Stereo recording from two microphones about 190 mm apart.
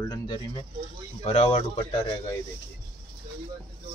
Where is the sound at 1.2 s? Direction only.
35° left (ahead or behind).